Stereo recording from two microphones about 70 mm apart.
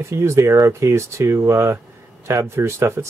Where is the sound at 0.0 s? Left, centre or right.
Right.